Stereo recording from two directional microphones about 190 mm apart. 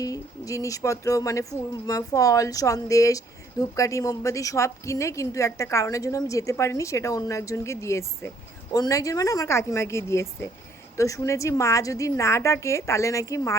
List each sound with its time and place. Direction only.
0.0 s speech: 20° left (ahead or behind)